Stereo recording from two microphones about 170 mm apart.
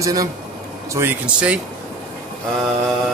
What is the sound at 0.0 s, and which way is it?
A man's voice, 20° right (ahead or behind).